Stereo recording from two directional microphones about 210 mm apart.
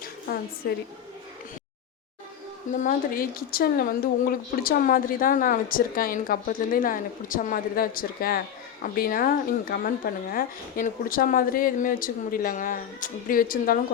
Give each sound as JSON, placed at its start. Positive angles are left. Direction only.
{"t": 0.3, "sound": "a woman's voice", "side_deg": 45}
{"t": 2.7, "sound": "speech", "side_deg": 40}